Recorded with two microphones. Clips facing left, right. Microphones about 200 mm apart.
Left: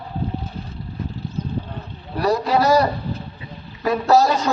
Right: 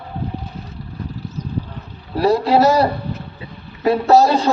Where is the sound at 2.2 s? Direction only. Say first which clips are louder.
Right 4 dB; 30° right (ahead or behind).